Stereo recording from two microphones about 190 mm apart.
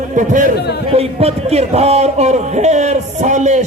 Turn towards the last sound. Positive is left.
turn(degrees=-40)  # may be behind; listen again after turning